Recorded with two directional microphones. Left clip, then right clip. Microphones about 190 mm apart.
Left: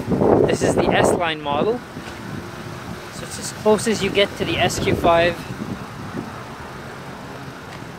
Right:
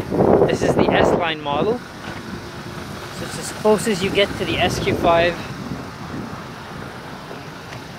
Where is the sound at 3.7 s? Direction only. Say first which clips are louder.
Left 1 dB; 10° right (ahead or behind).